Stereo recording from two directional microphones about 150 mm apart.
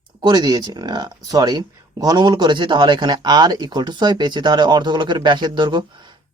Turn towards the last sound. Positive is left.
turn(degrees=-30)  # may be behind; listen again after turning